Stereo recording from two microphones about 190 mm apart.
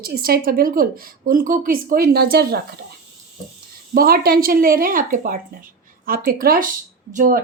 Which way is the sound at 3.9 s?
50° right (ahead or behind).